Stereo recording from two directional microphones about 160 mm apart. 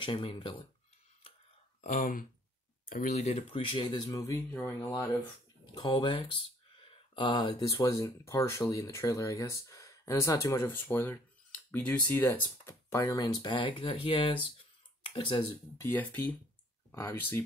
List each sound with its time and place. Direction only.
0.0 s speech: 35° left (ahead or behind)
1.8 s speech: 50° left (ahead or behind); by 4.7 s 10° left (ahead or behind)
5.8 s speech: 25° left (ahead or behind)
15.8 s speech: 10° left (ahead or behind)